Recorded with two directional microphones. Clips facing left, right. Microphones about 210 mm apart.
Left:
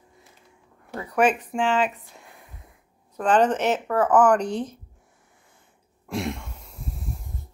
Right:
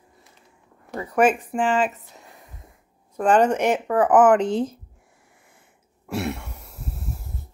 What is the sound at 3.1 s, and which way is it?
Speech, 10° right (ahead or behind).